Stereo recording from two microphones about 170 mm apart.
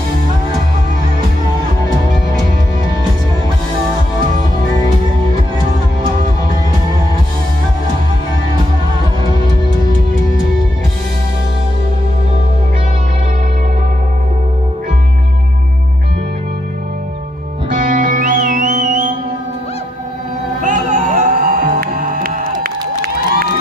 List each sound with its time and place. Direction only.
17.6 s music: 50° right (ahead or behind)
20.6 s music: 50° right (ahead or behind)